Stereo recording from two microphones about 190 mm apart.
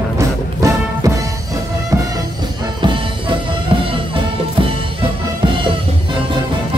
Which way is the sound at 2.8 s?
25° right (ahead or behind).